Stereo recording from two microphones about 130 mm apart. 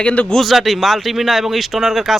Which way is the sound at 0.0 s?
10° left (ahead or behind).